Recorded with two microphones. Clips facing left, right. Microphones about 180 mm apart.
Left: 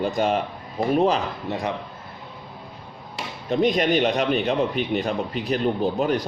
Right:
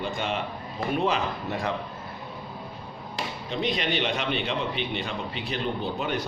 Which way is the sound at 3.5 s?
45° left (ahead or behind).